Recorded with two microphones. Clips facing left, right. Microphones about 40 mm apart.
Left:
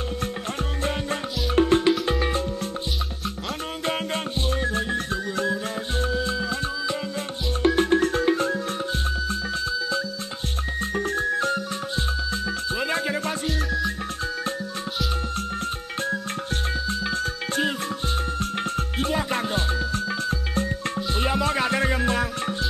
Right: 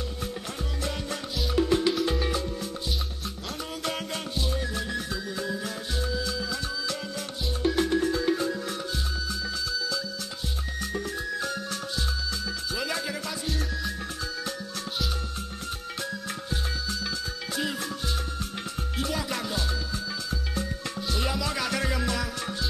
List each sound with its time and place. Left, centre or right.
1.5 s music: left
3.8 s music: left
9.3 s music: left
12.3 s music: left
13.5 s music: centre
16.8 s music: left